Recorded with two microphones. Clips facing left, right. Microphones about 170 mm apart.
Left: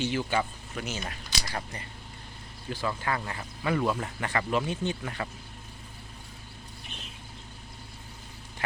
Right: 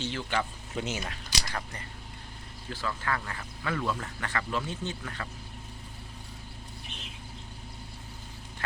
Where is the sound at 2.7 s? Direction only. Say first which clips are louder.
Left 2 dB; 15° left (ahead or behind).